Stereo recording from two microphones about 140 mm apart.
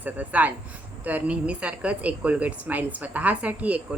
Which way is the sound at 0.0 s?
10° right (ahead or behind).